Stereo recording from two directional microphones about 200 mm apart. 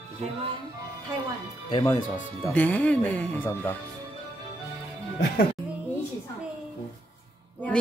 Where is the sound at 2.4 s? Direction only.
10° left (ahead or behind).